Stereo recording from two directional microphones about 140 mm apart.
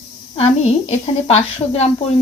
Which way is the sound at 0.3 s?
50° left (ahead or behind).